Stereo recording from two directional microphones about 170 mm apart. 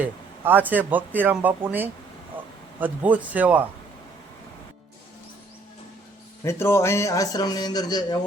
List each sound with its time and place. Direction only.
0.0 s speech: 10° right (ahead or behind)
6.4 s a man's voice: 15° left (ahead or behind)